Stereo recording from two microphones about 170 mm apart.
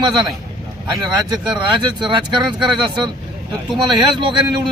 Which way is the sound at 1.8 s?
25° right (ahead or behind).